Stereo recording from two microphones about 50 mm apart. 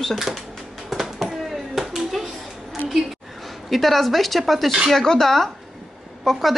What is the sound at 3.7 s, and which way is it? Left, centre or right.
Speech, centre.